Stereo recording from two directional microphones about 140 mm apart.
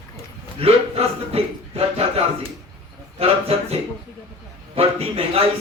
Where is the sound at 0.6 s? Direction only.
45° right (ahead or behind).